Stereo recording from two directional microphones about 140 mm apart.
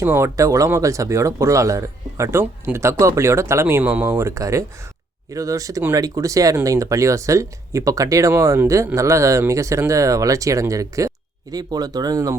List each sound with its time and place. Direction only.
0.0 s speech: 15° right (ahead or behind)